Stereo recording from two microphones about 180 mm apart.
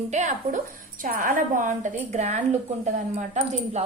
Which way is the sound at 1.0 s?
50° right (ahead or behind).